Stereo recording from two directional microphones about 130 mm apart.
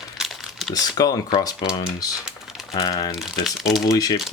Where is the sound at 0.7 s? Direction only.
30° left (ahead or behind).